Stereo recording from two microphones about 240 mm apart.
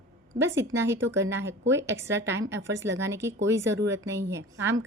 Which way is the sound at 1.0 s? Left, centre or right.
Right.